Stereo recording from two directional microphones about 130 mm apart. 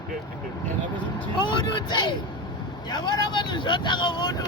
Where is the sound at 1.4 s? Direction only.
35° left (ahead or behind).